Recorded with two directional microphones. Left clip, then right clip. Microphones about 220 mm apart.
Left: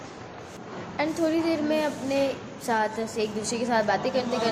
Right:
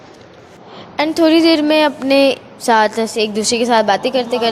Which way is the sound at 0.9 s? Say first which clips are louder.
Right 13 dB; 40° right (ahead or behind).